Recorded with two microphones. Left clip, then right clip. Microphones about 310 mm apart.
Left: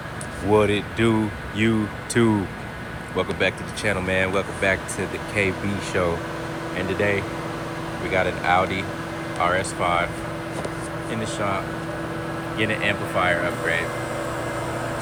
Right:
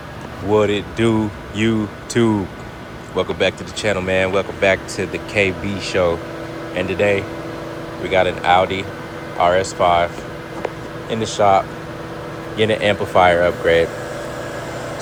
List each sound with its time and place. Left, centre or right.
0.5 s speech: centre
11.1 s speech: centre